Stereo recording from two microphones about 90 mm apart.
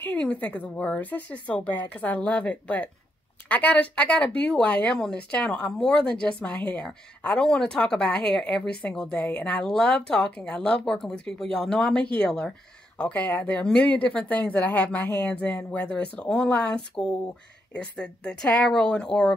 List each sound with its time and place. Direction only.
0.0 s speech: 15° left (ahead or behind)
15.0 s speech: 30° left (ahead or behind)
15.4 s speech: 15° left (ahead or behind)